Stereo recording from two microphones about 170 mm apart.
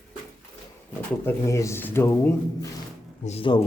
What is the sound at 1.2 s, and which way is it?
Speech, 15° left (ahead or behind).